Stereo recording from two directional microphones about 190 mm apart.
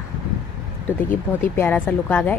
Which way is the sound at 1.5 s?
10° left (ahead or behind).